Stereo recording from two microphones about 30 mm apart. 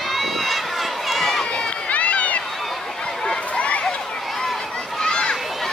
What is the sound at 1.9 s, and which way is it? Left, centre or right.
Run, left.